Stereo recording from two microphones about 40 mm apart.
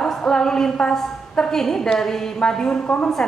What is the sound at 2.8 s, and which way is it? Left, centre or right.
Speech, left.